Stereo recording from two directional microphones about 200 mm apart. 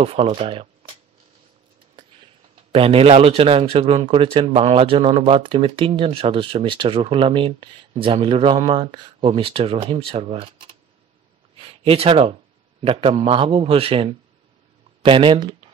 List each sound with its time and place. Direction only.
0.0 s speech: 30° right (ahead or behind)
2.0 s a sound: 25° right (ahead or behind)
2.7 s speech: 30° right (ahead or behind)